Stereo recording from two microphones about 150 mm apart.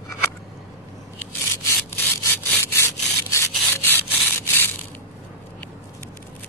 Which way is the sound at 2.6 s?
15° left (ahead or behind).